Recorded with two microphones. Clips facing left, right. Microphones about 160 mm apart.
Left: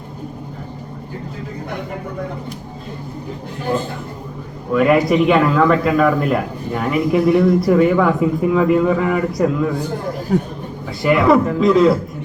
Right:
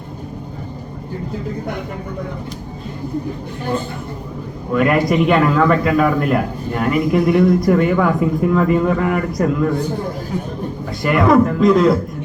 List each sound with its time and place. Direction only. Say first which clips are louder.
4.7 s a man's voice: left 2 dB; centre (ahead or behind)
10.3 s speech: left 10 dB; 70° left (ahead or behind)
11.0 s a man's voice: even; centre (ahead or behind)